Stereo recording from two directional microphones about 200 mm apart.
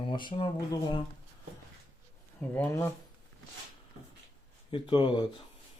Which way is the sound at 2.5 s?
10° left (ahead or behind).